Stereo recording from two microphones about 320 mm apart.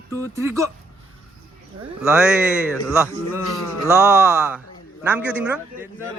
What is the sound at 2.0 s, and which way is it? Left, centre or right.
Speech, centre.